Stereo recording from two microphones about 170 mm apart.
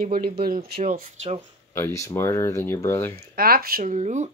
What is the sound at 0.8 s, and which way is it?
Speech, 40° right (ahead or behind).